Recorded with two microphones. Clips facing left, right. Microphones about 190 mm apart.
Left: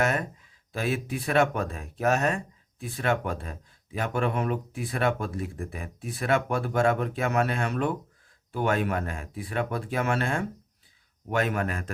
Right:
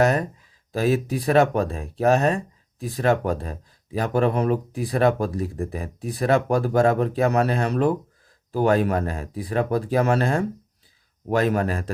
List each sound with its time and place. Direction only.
0.0 s speech: 35° right (ahead or behind)